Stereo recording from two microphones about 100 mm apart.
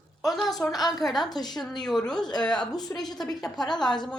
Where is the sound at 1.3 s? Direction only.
45° left (ahead or behind).